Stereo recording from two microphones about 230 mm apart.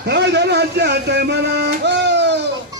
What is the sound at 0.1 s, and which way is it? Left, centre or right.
Music, right.